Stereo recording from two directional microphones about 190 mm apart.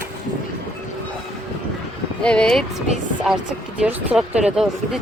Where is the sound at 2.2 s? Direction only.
5° left (ahead or behind).